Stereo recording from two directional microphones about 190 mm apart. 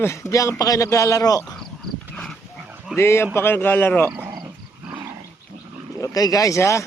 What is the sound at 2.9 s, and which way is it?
A man's voice, 15° left (ahead or behind).